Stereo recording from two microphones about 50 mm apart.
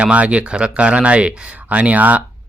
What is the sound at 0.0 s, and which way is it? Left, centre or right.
Speech, right.